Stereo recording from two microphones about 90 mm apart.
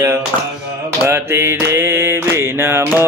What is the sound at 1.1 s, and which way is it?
Mantra, 30° right (ahead or behind).